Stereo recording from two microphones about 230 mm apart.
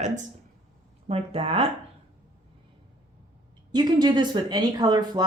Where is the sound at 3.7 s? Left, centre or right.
Centre.